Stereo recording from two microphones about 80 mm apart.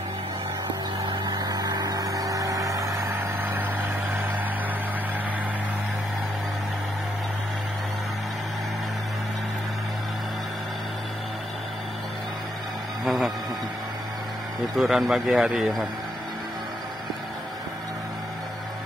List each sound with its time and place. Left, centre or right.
1.0 s vehicle: right
3.2 s vehicle: right
13.0 s a sound: centre
14.8 s speech: centre